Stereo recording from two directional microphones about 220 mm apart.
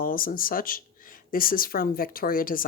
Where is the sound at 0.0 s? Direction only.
40° left (ahead or behind).